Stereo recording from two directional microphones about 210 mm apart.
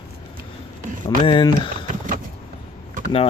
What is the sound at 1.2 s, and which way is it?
Speech, 25° left (ahead or behind).